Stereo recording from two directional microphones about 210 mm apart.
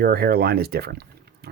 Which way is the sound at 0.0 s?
45° right (ahead or behind).